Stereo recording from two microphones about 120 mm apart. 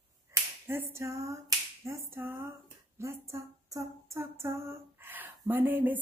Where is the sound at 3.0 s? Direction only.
25° right (ahead or behind).